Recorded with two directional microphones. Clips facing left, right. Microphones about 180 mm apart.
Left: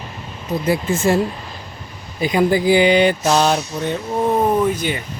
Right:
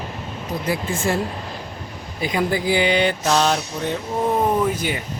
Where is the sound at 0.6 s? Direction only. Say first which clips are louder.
Left 6 dB; 25° left (ahead or behind).